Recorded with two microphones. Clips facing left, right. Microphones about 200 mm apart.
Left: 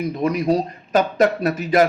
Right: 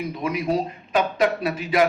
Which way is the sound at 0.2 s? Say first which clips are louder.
Left 4 dB; 40° left (ahead or behind).